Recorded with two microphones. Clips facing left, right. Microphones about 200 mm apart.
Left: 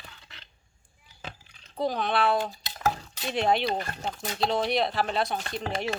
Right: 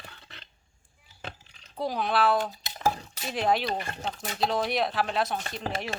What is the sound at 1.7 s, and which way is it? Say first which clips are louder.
Speech: left 1 dB; 5° right (ahead or behind).